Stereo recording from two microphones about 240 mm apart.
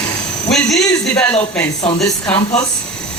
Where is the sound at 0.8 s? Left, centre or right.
Centre.